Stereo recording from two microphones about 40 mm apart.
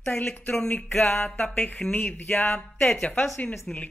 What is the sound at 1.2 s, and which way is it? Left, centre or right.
Speech, left.